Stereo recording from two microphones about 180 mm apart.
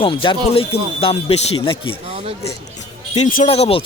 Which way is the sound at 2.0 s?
35° right (ahead or behind).